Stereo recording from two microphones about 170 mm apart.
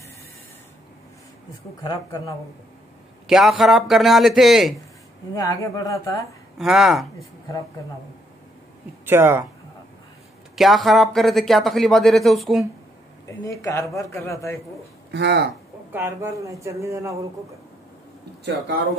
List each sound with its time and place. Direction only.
1.8 s speech: 20° left (ahead or behind)
3.3 s speech: centre (ahead or behind)
5.3 s speech: 20° left (ahead or behind)
6.6 s speech: 5° right (ahead or behind)
9.0 s speech: 15° right (ahead or behind)
10.5 s speech: centre (ahead or behind)
13.4 s a man's voice: 20° left (ahead or behind)
15.0 s speech: 90° right
15.9 s speech: 15° right (ahead or behind)